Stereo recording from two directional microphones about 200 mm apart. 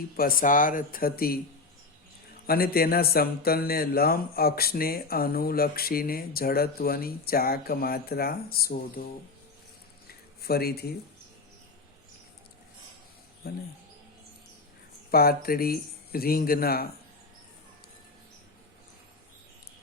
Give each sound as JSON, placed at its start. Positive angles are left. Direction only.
{"t": 0.2, "sound": "speech", "side_deg": 45}
{"t": 2.5, "sound": "speech", "side_deg": 50}
{"t": 10.4, "sound": "speech", "side_deg": 50}
{"t": 13.4, "sound": "speech", "side_deg": 50}
{"t": 15.1, "sound": "speech", "side_deg": 50}